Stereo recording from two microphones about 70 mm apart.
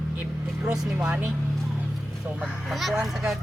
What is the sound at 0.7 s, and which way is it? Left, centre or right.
Speech, centre.